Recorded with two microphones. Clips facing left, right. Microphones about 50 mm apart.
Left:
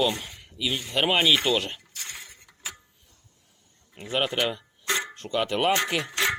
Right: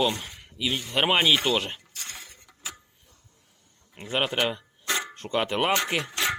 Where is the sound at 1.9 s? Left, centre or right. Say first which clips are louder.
Left 1 dB; centre.